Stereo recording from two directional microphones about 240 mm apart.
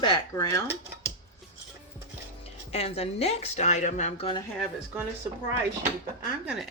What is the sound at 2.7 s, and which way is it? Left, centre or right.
Speech, left.